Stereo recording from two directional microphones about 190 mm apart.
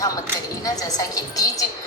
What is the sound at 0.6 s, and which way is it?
Speech, 20° left (ahead or behind).